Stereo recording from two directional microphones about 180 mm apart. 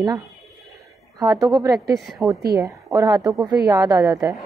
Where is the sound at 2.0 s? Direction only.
Centre (ahead or behind).